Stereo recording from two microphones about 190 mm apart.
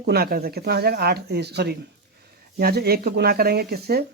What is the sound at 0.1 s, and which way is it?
Speech, 55° right (ahead or behind).